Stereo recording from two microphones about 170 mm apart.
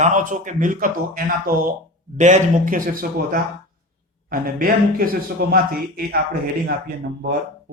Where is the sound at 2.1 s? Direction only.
45° right (ahead or behind).